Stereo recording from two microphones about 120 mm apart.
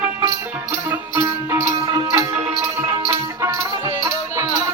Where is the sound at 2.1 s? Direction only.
25° right (ahead or behind).